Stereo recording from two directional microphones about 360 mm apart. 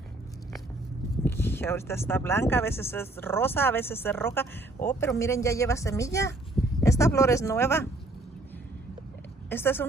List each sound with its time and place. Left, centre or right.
1.2 s speech: centre
9.5 s a woman's voice: centre